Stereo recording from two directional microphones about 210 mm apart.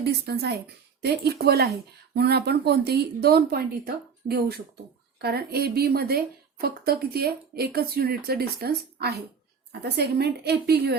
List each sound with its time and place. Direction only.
0.0 s a woman's voice: 50° right (ahead or behind)